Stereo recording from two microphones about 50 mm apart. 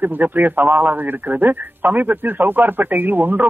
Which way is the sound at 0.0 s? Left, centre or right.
Right.